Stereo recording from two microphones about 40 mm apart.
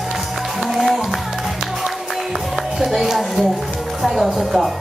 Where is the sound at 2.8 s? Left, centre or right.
Centre.